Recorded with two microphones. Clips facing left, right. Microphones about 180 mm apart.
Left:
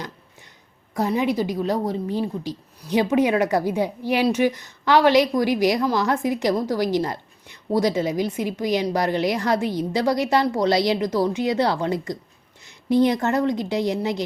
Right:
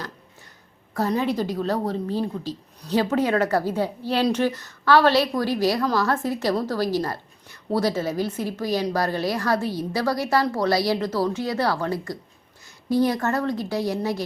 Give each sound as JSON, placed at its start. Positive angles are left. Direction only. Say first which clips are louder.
{"t": 0.9, "sound": "a woman's voice", "louder": "left 2 dB", "side_deg": 15}